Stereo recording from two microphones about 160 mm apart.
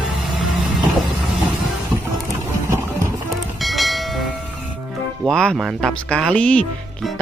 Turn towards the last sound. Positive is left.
turn(degrees=5)  # may be behind; listen again after turning